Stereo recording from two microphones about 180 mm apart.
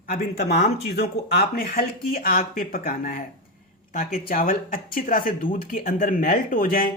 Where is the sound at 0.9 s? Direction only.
55° left (ahead or behind).